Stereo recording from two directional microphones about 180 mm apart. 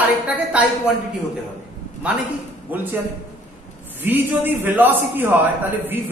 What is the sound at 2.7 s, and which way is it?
Speech, 10° right (ahead or behind).